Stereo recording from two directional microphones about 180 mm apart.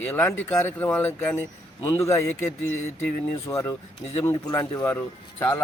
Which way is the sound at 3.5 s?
15° left (ahead or behind).